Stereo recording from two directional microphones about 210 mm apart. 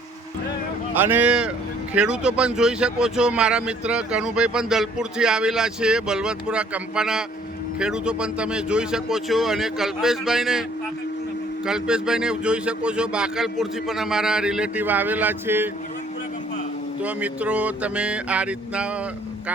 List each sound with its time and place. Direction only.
0.9 s speech: 10° right (ahead or behind)
11.6 s speech: 5° right (ahead or behind)
17.0 s a sound: 5° right (ahead or behind)